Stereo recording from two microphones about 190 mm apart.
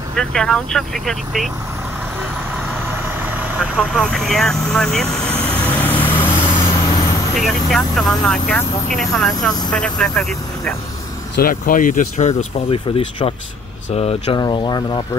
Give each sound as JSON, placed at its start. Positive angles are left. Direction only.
{"t": 0.1, "sound": "speech", "side_deg": 5}
{"t": 3.2, "sound": "vehicle", "side_deg": -10}
{"t": 3.5, "sound": "vehicle", "side_deg": 0}
{"t": 7.3, "sound": "speech", "side_deg": 0}
{"t": 11.3, "sound": "speech", "side_deg": 50}
{"t": 14.4, "sound": "speech", "side_deg": 20}